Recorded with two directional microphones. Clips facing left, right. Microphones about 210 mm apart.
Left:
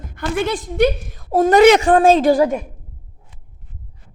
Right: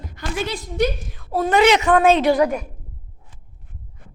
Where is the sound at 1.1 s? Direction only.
40° left (ahead or behind).